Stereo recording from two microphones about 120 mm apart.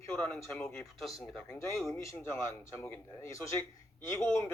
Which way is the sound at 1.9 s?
25° left (ahead or behind).